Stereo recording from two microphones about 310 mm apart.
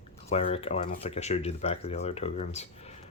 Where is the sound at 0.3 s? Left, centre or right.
Centre.